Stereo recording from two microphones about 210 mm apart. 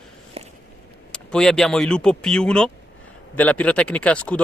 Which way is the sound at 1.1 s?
5° left (ahead or behind).